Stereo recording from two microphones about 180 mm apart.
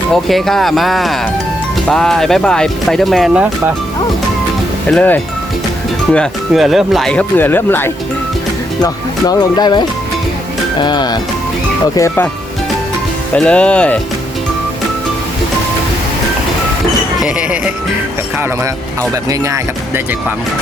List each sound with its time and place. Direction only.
0.1 s speech: centre (ahead or behind)
4.9 s speech: 10° left (ahead or behind)
8.8 s speech: 20° left (ahead or behind)
13.3 s speech: 5° left (ahead or behind)
17.2 s music: 5° right (ahead or behind)